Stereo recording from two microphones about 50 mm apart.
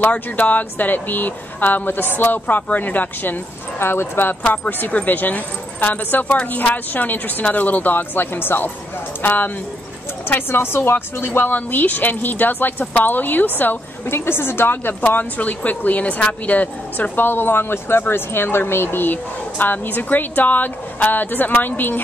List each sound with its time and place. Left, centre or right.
0.0 s a woman's voice: left
3.8 s a woman's voice: left
6.2 s speech: left
6.5 s a woman's voice: left
9.2 s a woman's voice: left
10.2 s a woman's voice: left
14.1 s a woman's voice: left